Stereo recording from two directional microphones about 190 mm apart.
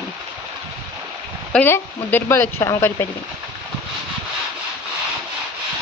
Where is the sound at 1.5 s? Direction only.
10° left (ahead or behind).